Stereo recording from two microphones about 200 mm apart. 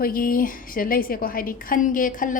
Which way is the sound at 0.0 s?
45° left (ahead or behind).